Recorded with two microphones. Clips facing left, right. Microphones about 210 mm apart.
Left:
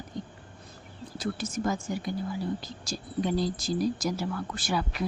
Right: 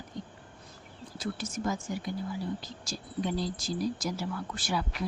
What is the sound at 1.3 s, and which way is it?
A woman's voice, 40° left (ahead or behind).